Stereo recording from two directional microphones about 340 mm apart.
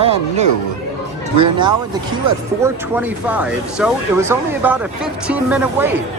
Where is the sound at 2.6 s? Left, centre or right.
Centre.